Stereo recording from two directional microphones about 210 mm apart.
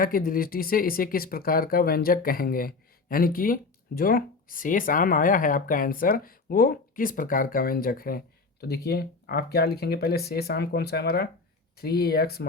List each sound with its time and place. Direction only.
0.0 s speech: 45° left (ahead or behind)